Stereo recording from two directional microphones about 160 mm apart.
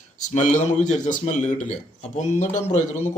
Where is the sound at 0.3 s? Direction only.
50° left (ahead or behind).